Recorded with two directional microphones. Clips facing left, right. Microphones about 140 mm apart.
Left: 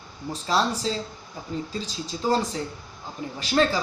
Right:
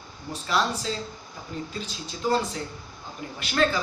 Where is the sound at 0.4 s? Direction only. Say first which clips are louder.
Left 2 dB; 35° left (ahead or behind).